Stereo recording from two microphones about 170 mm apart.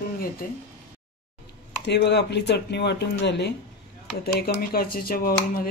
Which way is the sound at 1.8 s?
85° left.